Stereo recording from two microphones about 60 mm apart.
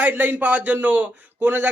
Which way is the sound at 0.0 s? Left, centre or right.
Right.